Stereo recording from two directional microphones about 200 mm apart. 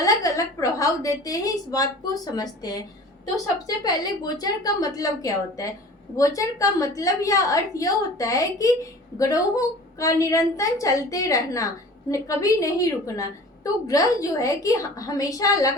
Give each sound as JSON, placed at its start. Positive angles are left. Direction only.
{"t": 0.0, "sound": "a woman's voice", "side_deg": 15}
{"t": 3.8, "sound": "a woman's voice", "side_deg": 20}